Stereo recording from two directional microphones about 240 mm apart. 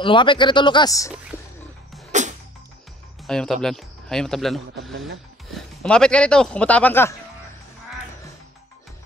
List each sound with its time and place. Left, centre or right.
0.0 s speech: centre
1.3 s music: centre
3.3 s speech: centre